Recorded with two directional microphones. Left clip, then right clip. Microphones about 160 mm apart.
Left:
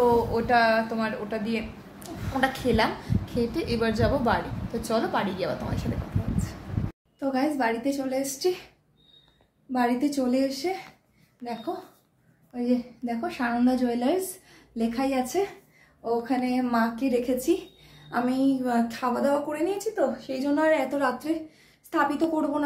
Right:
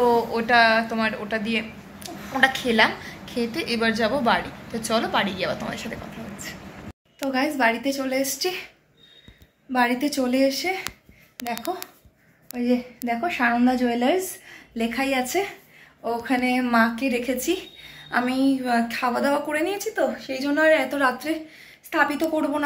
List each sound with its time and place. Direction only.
0.0 s a woman's voice: 10° left (ahead or behind)
7.2 s a woman's voice: 5° left (ahead or behind)
9.7 s a woman's voice: 10° left (ahead or behind)
12.4 s a woman's voice: 20° right (ahead or behind)
14.8 s a woman's voice: 5° right (ahead or behind); by 22.6 s 15° left (ahead or behind)